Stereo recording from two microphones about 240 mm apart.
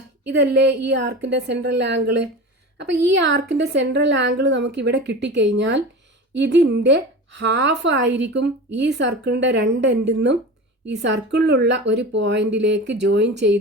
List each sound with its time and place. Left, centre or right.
0.3 s a woman's voice: right